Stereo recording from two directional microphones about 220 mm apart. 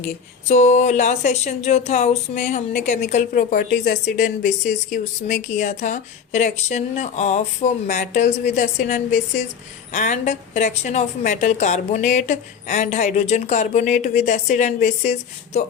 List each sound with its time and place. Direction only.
0.0 s a woman's voice: 30° left (ahead or behind)